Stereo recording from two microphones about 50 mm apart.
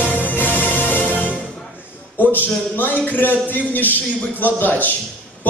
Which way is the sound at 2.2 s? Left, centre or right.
Left.